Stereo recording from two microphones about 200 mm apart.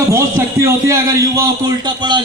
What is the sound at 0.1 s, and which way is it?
A man's voice, 15° right (ahead or behind).